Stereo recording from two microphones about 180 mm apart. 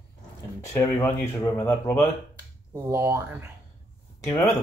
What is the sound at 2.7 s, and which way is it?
Speech, 15° right (ahead or behind).